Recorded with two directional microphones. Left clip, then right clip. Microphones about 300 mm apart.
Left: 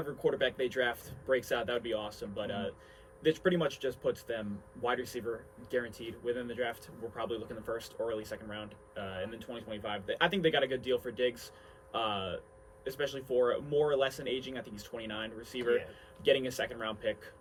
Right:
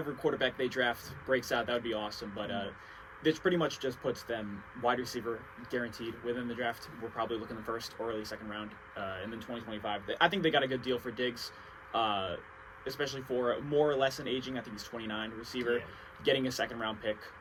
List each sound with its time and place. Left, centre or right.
0.2 s a man's voice: centre